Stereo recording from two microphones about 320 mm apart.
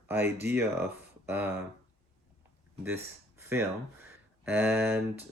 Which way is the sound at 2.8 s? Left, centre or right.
Centre.